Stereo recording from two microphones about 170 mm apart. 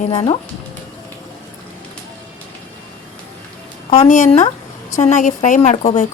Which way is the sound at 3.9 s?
40° left (ahead or behind).